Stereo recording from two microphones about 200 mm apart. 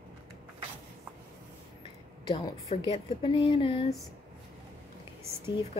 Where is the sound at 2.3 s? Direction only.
25° left (ahead or behind).